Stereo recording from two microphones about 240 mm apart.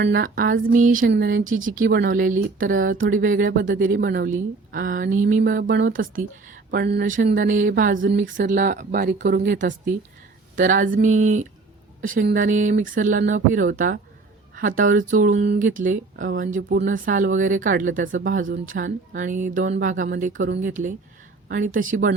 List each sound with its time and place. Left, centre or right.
0.0 s speech: right
1.5 s speech: right